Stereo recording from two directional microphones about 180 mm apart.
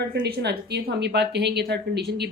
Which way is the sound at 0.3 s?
65° right (ahead or behind).